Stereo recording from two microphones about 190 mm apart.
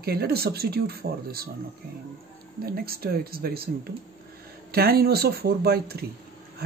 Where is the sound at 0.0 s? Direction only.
55° right (ahead or behind).